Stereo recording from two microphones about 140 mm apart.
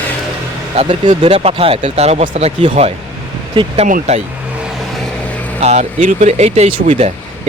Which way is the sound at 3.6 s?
35° right (ahead or behind).